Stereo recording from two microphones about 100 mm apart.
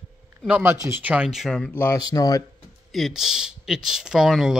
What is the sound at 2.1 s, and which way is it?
Speech, 35° left (ahead or behind).